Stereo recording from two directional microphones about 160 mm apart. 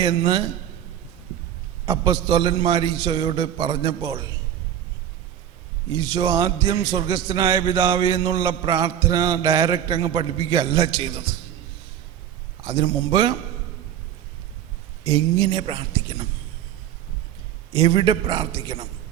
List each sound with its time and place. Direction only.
0.0 s speech: 30° right (ahead or behind)
1.9 s music: 25° right (ahead or behind)
5.9 s music: 25° right (ahead or behind)
12.6 s speech: 30° right (ahead or behind)
15.0 s speech: 30° right (ahead or behind)
17.7 s music: 30° right (ahead or behind)